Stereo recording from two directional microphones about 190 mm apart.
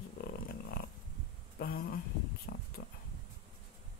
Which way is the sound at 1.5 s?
50° left (ahead or behind).